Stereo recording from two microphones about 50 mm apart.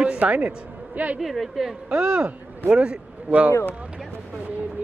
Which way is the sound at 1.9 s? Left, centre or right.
Right.